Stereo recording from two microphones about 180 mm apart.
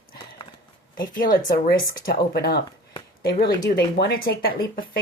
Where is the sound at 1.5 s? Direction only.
55° left (ahead or behind).